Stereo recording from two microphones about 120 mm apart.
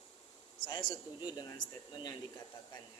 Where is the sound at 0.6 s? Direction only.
40° left (ahead or behind).